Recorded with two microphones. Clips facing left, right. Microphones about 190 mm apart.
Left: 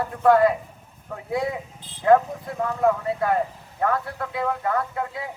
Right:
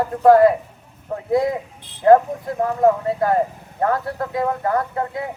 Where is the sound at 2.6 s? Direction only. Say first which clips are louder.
Right 5 dB; 35° right (ahead or behind).